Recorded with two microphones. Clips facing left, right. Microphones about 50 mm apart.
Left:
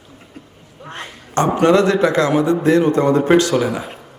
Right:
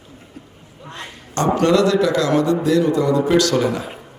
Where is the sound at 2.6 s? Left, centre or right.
Left.